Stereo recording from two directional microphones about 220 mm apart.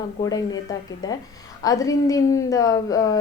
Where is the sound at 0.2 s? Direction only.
15° left (ahead or behind).